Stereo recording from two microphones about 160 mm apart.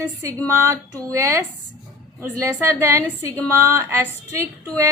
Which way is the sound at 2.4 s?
20° right (ahead or behind).